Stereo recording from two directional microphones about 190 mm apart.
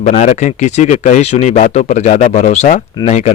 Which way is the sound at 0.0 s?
40° left (ahead or behind).